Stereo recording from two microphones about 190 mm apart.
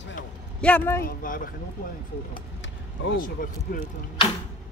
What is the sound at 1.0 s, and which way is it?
Speech, 45° left (ahead or behind).